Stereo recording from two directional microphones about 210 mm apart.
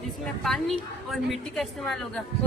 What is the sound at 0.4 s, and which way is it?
A woman's voice, centre (ahead or behind).